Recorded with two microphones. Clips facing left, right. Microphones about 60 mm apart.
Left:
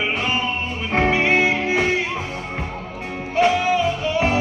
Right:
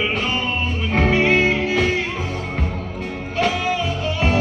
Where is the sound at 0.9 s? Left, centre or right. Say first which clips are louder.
Right 1 dB; centre.